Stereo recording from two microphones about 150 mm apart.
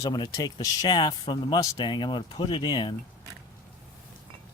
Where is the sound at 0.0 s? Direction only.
25° left (ahead or behind).